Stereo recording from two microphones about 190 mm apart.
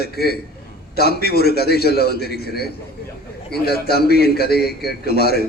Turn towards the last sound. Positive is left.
turn(degrees=55)  # may be behind; listen again after turning